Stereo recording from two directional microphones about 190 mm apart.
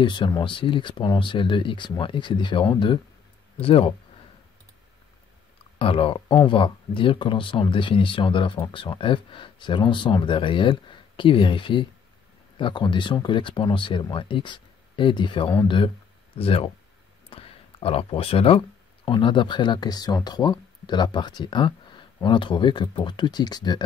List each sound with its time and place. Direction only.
0.0 s speech: 25° left (ahead or behind)
5.8 s speech: 30° left (ahead or behind)
17.3 s a sound: 30° left (ahead or behind)
19.0 s speech: 25° left (ahead or behind)